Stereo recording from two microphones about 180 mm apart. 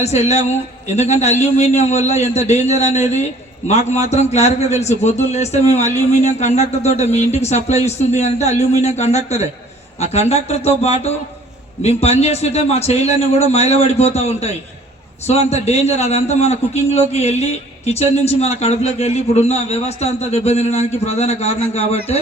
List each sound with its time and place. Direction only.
0.0 s speech: 40° left (ahead or behind)